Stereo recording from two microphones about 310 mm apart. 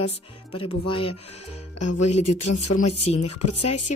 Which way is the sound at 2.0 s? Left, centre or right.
Left.